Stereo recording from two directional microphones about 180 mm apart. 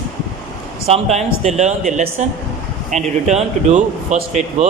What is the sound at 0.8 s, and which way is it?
Speech, 35° right (ahead or behind).